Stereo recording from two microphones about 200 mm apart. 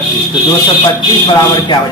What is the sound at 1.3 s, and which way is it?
Speech, 15° left (ahead or behind).